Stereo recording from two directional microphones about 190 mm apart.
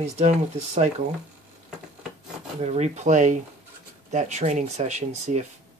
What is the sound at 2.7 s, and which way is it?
Speech, 35° right (ahead or behind).